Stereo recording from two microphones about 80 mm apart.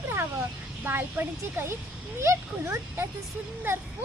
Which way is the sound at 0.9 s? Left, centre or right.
Right.